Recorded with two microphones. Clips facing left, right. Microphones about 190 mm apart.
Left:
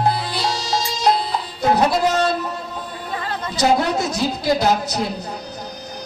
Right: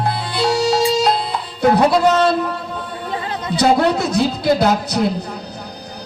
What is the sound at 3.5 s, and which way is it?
A woman's voice, 60° right (ahead or behind).